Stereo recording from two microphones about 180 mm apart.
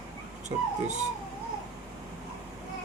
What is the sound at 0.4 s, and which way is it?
Speech, 40° right (ahead or behind).